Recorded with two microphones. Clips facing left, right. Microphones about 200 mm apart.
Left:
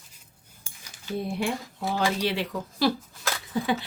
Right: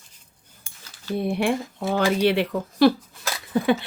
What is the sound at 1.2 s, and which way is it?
Speech, 65° right (ahead or behind).